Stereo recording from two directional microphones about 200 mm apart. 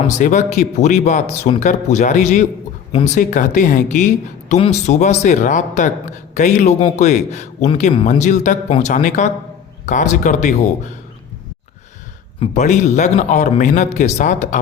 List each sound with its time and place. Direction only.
0.2 s speech: 35° left (ahead or behind)
12.4 s speech: 35° left (ahead or behind)